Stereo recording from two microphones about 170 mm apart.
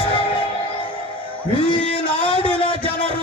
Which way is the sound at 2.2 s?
30° left (ahead or behind).